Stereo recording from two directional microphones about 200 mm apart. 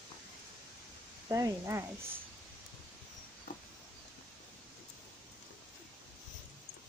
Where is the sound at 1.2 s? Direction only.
15° right (ahead or behind).